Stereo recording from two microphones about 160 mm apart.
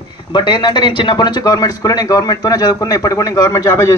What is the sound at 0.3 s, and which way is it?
A man's voice, 30° left (ahead or behind).